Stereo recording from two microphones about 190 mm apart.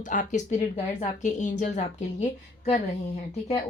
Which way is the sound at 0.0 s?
40° left (ahead or behind).